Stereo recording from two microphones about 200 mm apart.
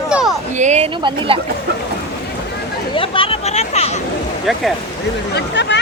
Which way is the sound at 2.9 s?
25° left (ahead or behind).